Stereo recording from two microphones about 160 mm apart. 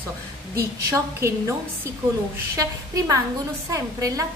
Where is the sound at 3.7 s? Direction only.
20° right (ahead or behind).